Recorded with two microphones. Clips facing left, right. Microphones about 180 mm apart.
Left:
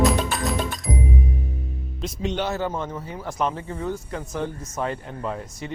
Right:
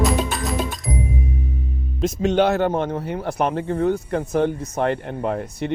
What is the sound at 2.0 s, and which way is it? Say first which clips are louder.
Speech: right 9 dB; 50° right (ahead or behind).